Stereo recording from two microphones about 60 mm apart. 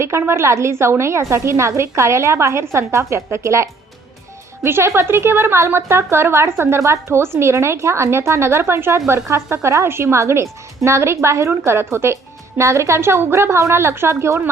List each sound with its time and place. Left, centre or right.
0.0 s a woman's voice: right